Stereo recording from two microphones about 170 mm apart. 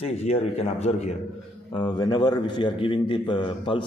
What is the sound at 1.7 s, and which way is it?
A man's voice, 25° left (ahead or behind).